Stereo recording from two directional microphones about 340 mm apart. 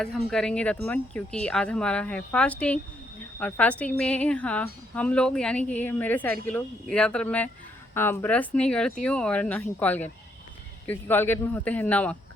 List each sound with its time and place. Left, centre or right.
0.0 s a woman's voice: centre